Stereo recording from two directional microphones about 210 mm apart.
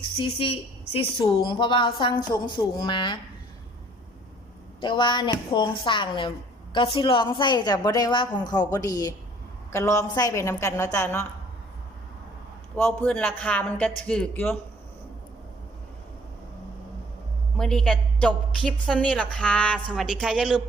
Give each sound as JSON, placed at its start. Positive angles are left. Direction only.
{"t": 0.3, "sound": "a woman's voice", "side_deg": 25}
{"t": 4.8, "sound": "a woman's voice", "side_deg": 20}
{"t": 12.7, "sound": "a man's voice", "side_deg": 5}
{"t": 17.6, "sound": "a woman's voice", "side_deg": 5}